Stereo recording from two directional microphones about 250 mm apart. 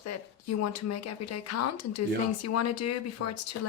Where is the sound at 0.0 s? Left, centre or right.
Left.